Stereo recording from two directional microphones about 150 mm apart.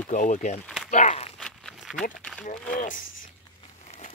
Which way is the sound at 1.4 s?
Centre (ahead or behind).